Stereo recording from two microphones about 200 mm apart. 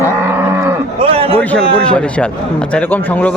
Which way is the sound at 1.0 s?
30° right (ahead or behind).